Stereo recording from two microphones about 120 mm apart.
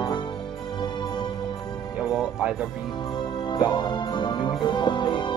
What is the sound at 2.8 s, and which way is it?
Music, 40° left (ahead or behind).